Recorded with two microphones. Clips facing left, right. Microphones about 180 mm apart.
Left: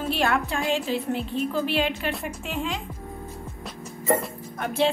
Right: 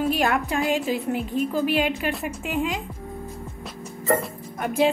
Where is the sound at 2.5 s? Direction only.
15° right (ahead or behind).